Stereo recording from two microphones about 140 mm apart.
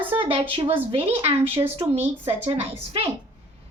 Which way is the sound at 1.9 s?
15° right (ahead or behind).